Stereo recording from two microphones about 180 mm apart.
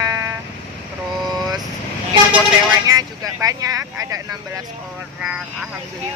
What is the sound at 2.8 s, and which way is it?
Speech, 20° right (ahead or behind).